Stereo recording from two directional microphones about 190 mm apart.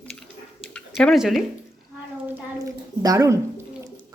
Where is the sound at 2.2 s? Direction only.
15° right (ahead or behind).